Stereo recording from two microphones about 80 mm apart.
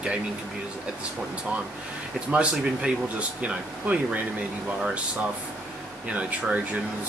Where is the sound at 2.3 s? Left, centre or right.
Centre.